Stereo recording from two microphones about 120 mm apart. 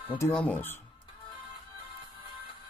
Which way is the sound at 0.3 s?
10° left (ahead or behind).